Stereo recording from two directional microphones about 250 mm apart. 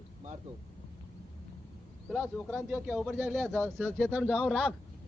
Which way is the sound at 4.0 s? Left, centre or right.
Centre.